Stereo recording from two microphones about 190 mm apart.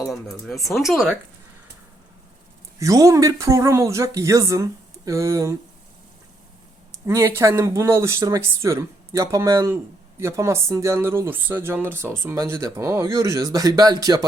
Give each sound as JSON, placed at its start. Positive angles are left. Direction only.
{"t": 0.4, "sound": "speech", "side_deg": 0}
{"t": 2.7, "sound": "speech", "side_deg": -15}
{"t": 7.0, "sound": "speech", "side_deg": -15}